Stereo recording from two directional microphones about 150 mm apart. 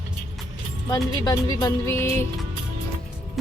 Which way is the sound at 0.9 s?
25° left (ahead or behind).